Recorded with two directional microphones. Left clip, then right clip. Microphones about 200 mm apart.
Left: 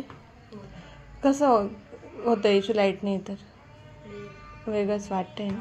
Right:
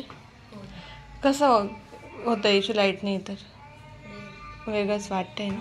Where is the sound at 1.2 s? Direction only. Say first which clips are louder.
Right 1 dB; 15° left (ahead or behind).